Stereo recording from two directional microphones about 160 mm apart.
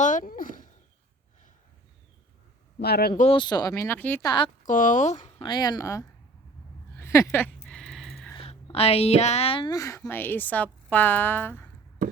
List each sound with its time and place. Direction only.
0.0 s a sound: 55° left (ahead or behind)
2.7 s speech: 85° left
3.3 s speech: 25° left (ahead or behind)
4.3 s a woman's voice: 30° left (ahead or behind)
4.6 s speech: 55° left (ahead or behind)
5.4 s speech: 25° left (ahead or behind)
6.9 s a sound: 15° left (ahead or behind)
7.3 s a woman's voice: 10° left (ahead or behind)
7.7 s a sound: centre (ahead or behind)
8.7 s a woman's voice: 40° left (ahead or behind)
9.6 s a woman's voice: 20° left (ahead or behind)